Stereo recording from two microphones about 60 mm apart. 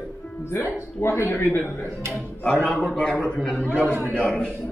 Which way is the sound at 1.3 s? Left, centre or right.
Left.